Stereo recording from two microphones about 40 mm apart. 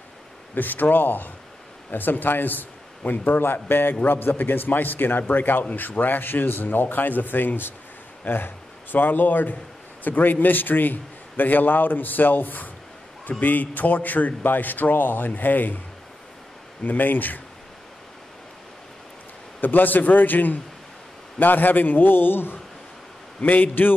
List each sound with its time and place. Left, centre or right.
0.6 s a man's voice: left
3.9 s a man's voice: left
16.8 s a man's voice: left
19.6 s a man's voice: left
23.4 s a man's voice: left